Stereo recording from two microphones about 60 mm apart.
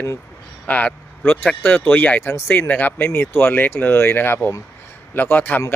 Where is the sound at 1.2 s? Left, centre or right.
Left.